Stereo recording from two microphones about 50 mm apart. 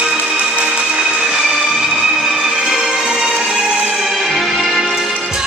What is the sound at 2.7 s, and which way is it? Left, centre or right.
Music, centre.